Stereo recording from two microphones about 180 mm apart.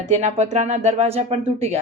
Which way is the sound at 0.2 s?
40° right (ahead or behind).